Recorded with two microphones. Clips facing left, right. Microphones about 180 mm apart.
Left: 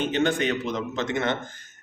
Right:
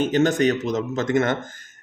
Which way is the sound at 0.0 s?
40° right (ahead or behind).